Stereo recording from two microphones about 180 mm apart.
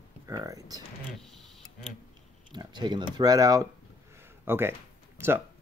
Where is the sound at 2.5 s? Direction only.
25° right (ahead or behind).